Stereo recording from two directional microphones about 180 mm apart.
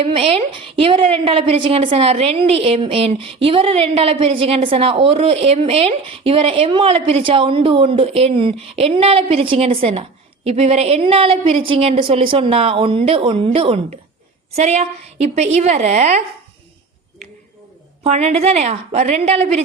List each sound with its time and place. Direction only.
0.0 s a woman's voice: 30° right (ahead or behind)
18.0 s a woman's voice: 35° right (ahead or behind)